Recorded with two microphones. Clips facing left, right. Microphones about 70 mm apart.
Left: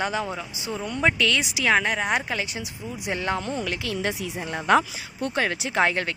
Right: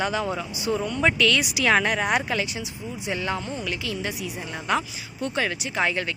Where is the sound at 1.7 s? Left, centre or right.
Centre.